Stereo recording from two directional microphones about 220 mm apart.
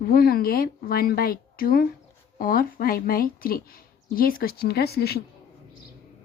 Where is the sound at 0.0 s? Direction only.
40° left (ahead or behind).